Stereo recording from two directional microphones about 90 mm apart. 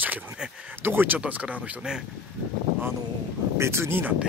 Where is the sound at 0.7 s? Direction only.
25° right (ahead or behind).